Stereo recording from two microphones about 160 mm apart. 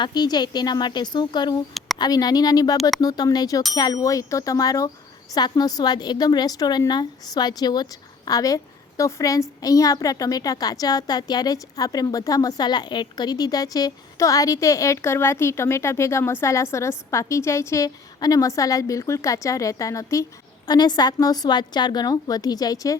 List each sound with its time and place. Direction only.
0.0 s a woman's voice: 25° left (ahead or behind)